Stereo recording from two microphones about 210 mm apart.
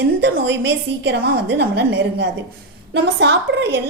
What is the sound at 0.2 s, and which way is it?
A woman's voice, 55° right (ahead or behind).